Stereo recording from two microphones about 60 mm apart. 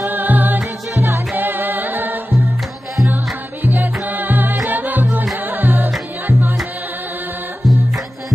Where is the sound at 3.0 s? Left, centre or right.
Right.